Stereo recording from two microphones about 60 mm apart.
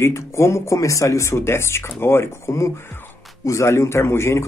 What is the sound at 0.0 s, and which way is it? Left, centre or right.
Speech, left.